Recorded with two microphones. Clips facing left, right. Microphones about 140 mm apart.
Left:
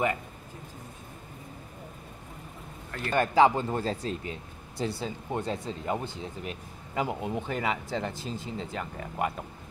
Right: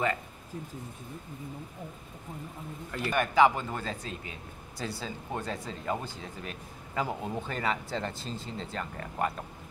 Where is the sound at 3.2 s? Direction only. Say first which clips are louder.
Left 2 dB; 30° left (ahead or behind); by 9.3 s 15° left (ahead or behind).